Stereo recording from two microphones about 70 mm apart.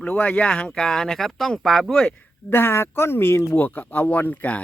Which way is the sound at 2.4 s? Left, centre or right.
Left.